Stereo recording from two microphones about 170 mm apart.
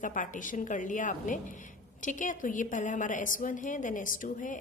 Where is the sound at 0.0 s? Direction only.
50° left (ahead or behind).